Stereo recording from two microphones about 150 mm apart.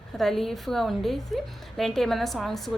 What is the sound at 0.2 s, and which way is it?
A woman's voice, centre (ahead or behind).